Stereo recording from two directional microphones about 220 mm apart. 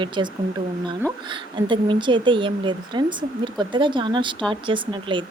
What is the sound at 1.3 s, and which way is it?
A woman's voice, 20° right (ahead or behind).